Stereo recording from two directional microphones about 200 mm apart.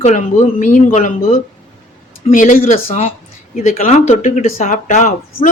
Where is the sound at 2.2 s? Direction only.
40° left (ahead or behind).